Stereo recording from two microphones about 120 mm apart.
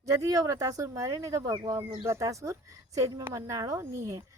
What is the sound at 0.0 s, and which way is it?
Speech, 30° right (ahead or behind).